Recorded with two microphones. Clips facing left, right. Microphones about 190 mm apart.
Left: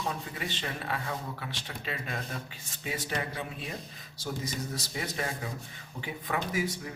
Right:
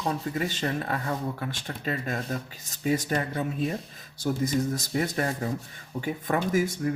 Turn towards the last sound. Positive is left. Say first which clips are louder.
# right 8 dB
turn(degrees=-50)  # may be behind; listen again after turning